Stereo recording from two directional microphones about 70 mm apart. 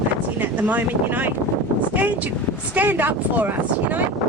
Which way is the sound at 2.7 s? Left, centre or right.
Right.